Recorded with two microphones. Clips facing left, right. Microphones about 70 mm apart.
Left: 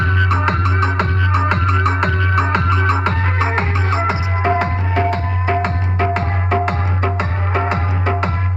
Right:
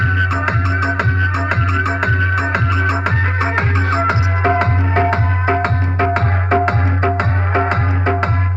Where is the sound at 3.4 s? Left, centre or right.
Right.